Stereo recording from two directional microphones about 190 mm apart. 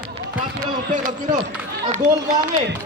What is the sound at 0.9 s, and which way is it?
Speech, 45° right (ahead or behind).